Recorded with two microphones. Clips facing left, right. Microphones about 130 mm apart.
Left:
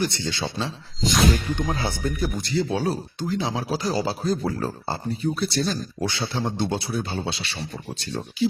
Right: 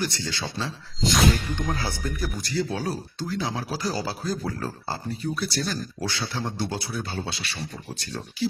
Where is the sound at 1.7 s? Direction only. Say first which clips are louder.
Left 4 dB; 25° left (ahead or behind).